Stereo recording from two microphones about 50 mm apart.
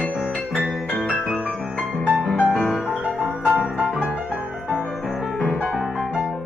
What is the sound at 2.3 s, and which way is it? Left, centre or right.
Music, left.